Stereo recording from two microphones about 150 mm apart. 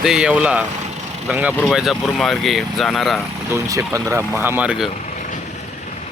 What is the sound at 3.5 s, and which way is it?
Speech, 20° right (ahead or behind).